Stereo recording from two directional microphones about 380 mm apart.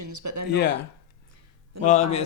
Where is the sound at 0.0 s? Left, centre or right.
Right.